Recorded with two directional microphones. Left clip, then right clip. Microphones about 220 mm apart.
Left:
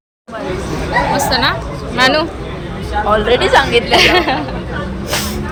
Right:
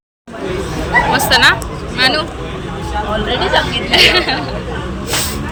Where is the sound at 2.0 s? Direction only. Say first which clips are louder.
Left 2 dB; 10° left (ahead or behind).